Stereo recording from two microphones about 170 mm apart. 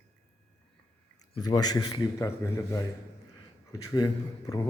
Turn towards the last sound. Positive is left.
turn(degrees=25)  # may be behind; listen again after turning